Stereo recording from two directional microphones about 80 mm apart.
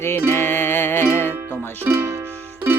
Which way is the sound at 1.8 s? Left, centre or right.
Right.